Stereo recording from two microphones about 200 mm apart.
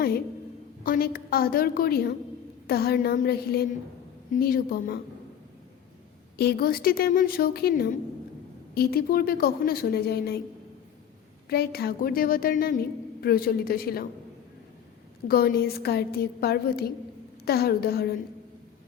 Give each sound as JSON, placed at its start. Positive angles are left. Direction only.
{"t": 0.9, "sound": "a woman's voice", "side_deg": 50}
{"t": 6.3, "sound": "a woman's voice", "side_deg": 55}
{"t": 11.4, "sound": "a woman's voice", "side_deg": 50}
{"t": 15.3, "sound": "a woman's voice", "side_deg": 50}